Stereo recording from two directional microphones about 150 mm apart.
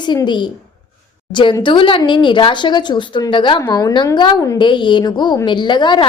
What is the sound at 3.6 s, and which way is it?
A woman's voice, 25° left (ahead or behind).